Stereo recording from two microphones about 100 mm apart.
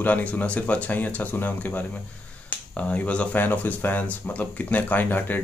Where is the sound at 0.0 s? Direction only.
15° left (ahead or behind).